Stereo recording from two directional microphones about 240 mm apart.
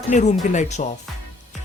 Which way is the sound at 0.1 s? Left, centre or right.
Left.